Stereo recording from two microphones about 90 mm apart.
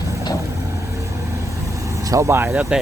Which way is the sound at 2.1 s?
35° right (ahead or behind).